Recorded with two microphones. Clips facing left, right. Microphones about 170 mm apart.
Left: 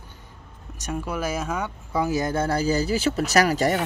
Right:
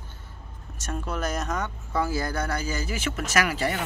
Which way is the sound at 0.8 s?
10° left (ahead or behind).